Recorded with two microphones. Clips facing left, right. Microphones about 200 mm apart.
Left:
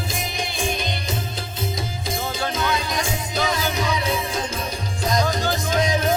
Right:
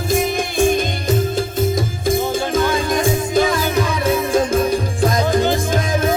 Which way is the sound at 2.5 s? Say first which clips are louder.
Right 8 dB; 50° right (ahead or behind).